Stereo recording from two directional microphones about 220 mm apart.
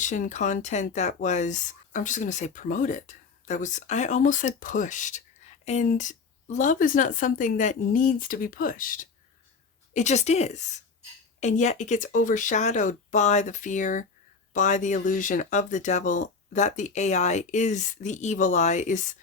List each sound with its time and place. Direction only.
0.0 s speech: 35° left (ahead or behind)